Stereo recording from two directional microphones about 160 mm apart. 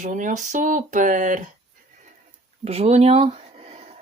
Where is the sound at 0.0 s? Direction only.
55° right (ahead or behind).